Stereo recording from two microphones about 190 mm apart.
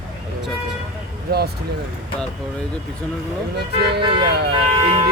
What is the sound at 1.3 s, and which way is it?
Speech, 55° right (ahead or behind).